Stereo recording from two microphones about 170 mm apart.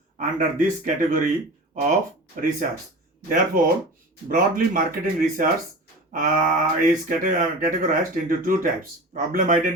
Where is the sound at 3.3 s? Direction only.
55° right (ahead or behind).